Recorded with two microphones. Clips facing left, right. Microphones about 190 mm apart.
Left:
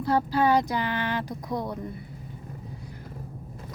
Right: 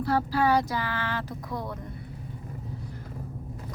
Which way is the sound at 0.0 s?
20° left (ahead or behind).